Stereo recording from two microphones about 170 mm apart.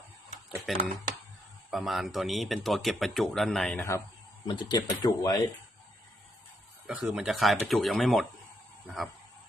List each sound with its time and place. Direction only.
0.7 s speech: centre (ahead or behind)
4.4 s speech: 25° left (ahead or behind)
6.8 s speech: 5° right (ahead or behind)